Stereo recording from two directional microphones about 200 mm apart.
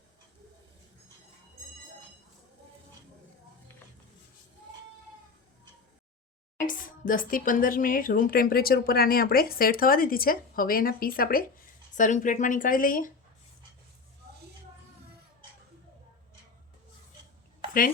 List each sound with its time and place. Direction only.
6.7 s speech: 40° left (ahead or behind)